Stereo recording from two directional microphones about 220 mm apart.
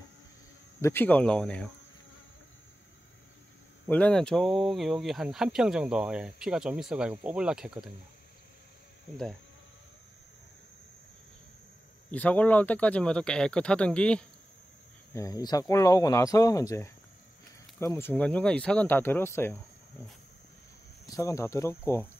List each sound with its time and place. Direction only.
0.7 s speech: 10° left (ahead or behind)
3.8 s speech: 5° left (ahead or behind)
9.1 s speech: centre (ahead or behind)
12.1 s speech: 5° left (ahead or behind)
15.1 s speech: 15° left (ahead or behind)
21.1 s speech: 15° left (ahead or behind)